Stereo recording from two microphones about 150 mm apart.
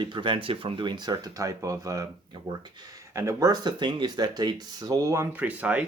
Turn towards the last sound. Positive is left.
turn(degrees=-10)  # may be behind; listen again after turning